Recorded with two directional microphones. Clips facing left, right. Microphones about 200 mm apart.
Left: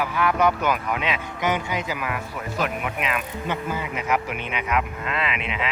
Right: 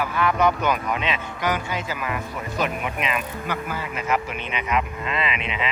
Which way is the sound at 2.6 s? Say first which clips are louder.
Right 1 dB; centre (ahead or behind).